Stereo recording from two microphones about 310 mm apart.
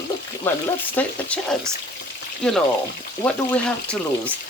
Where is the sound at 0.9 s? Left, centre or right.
Centre.